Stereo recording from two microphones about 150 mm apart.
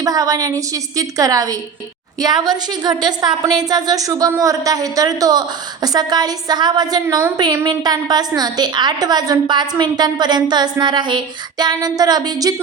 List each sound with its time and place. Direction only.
0.0 s a woman's voice: 25° right (ahead or behind)